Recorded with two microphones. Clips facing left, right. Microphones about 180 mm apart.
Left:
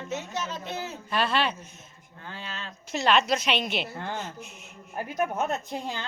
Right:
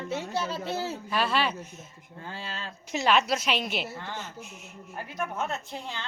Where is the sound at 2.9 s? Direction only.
10° right (ahead or behind).